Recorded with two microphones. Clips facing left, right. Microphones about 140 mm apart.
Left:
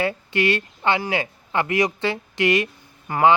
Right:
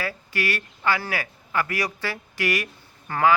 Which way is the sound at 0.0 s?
25° left (ahead or behind).